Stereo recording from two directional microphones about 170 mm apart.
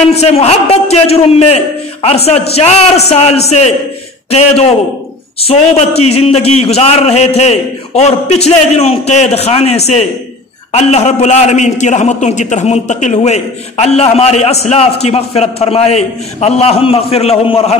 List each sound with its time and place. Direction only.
0.1 s a man's voice: 40° left (ahead or behind)